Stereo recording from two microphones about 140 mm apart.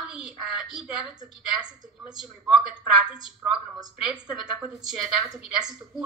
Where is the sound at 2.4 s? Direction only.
Centre (ahead or behind).